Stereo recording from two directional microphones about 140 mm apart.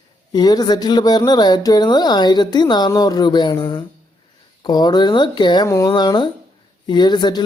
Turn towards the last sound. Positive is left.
turn(degrees=30)  # may be behind; listen again after turning